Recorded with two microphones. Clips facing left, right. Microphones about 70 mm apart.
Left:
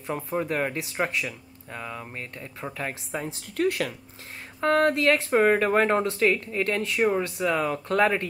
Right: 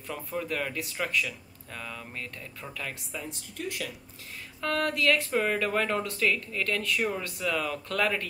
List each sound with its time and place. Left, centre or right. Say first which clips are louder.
0.1 s speech: left 5 dB; left
3.1 s speech: left 6 dB; left
4.6 s speech: left 7 dB; left